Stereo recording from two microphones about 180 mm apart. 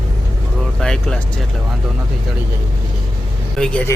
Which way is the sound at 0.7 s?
5° left (ahead or behind).